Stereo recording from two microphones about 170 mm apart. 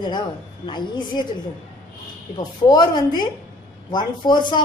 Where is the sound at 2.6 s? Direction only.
25° left (ahead or behind).